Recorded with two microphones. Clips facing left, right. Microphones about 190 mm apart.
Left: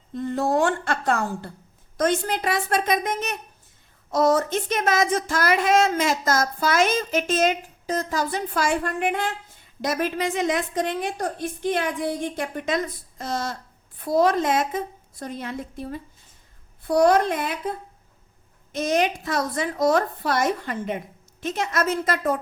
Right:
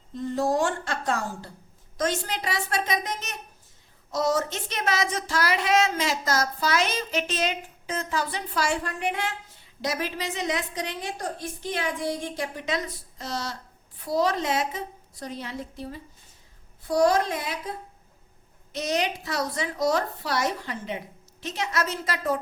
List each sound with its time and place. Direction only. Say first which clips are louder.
0.1 s a woman's voice: left 2 dB; 60° left (ahead or behind)
18.7 s speech: left 5 dB; 50° left (ahead or behind)